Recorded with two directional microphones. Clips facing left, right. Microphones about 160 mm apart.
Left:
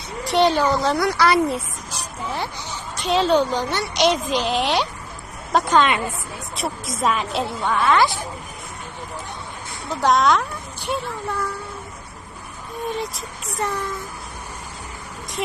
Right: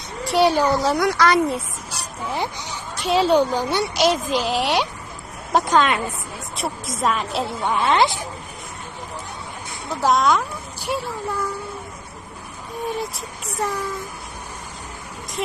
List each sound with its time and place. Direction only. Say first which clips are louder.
0.3 s a child's voice: even; 10° right (ahead or behind)
0.9 s a woman's voice: even; centre (ahead or behind)
1.9 s a woman's voice: right 1 dB; 10° right (ahead or behind)
7.6 s a child's voice: even; 15° right (ahead or behind)
10.0 s a woman's voice: left 1 dB; centre (ahead or behind)
13.1 s a woman's voice: right 1 dB; centre (ahead or behind)